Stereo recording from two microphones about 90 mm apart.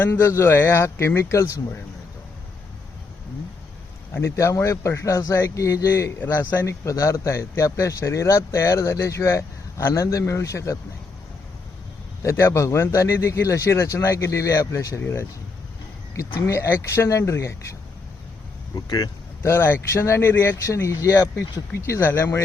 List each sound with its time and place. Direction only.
0.0 s speech: 25° left (ahead or behind)
4.1 s speech: 30° left (ahead or behind)
6.1 s speech: 20° left (ahead or behind)
6.7 s speech: 35° left (ahead or behind)
12.2 s speech: 30° left (ahead or behind)
18.7 s speech: 50° left (ahead or behind)
19.4 s speech: 30° left (ahead or behind)